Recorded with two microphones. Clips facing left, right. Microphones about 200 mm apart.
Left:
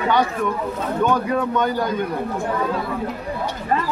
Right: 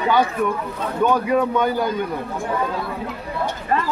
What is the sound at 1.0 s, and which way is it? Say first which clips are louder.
Speech: right 3 dB; 10° right (ahead or behind).